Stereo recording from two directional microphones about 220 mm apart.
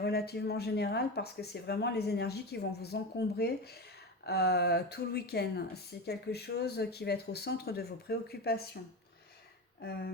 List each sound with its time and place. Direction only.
0.0 s speech: 45° left (ahead or behind)